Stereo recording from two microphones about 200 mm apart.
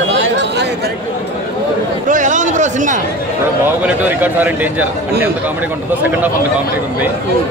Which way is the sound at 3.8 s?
10° right (ahead or behind).